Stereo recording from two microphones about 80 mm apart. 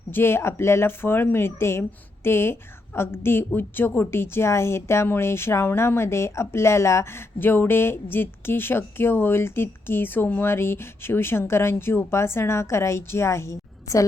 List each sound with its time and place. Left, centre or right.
0.1 s a woman's voice: left